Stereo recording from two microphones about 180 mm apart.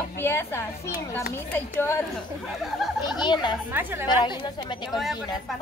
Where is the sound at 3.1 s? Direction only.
25° left (ahead or behind).